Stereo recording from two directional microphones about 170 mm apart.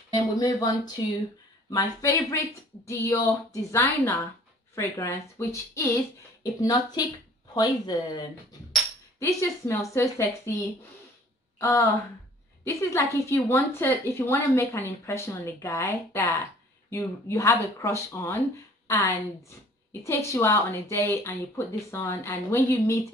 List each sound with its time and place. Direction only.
0.4 s a woman's voice: 20° left (ahead or behind)
11.5 s a sound: 10° left (ahead or behind)
12.6 s a woman's voice: 15° left (ahead or behind)